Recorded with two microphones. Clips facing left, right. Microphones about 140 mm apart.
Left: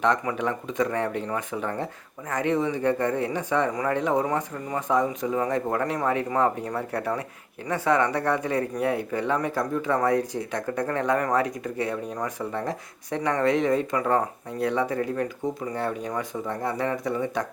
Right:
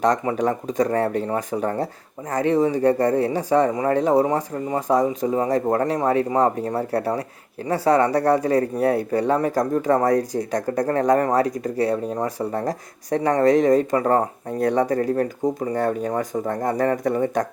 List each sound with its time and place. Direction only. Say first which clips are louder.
0.0 s speech: right 4 dB; 40° right (ahead or behind)